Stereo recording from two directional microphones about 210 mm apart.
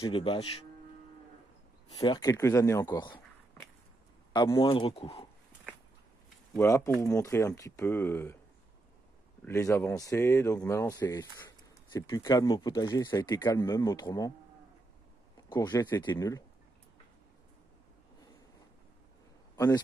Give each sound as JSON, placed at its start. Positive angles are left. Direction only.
{"t": 0.0, "sound": "speech", "side_deg": 25}
{"t": 2.0, "sound": "speech", "side_deg": 20}
{"t": 4.3, "sound": "speech", "side_deg": 20}
{"t": 6.5, "sound": "speech", "side_deg": 15}
{"t": 9.4, "sound": "speech", "side_deg": 15}
{"t": 15.5, "sound": "speech", "side_deg": 20}
{"t": 19.5, "sound": "a sound", "side_deg": 15}